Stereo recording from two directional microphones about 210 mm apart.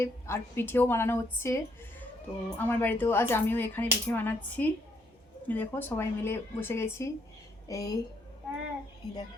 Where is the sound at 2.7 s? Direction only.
10° left (ahead or behind).